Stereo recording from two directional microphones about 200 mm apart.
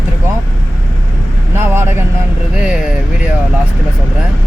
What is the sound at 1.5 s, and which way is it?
Vehicle, 10° right (ahead or behind).